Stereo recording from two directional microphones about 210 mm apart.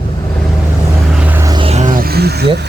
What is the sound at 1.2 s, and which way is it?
Vehicle, 15° right (ahead or behind).